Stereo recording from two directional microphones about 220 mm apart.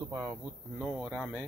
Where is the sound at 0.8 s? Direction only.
5° right (ahead or behind).